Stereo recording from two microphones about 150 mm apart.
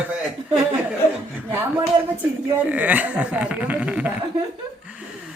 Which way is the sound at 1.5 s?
10° right (ahead or behind).